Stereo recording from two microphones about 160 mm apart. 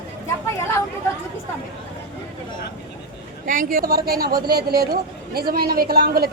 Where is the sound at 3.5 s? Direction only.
60° right (ahead or behind).